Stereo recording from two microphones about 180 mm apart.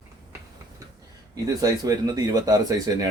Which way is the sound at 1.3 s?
20° right (ahead or behind).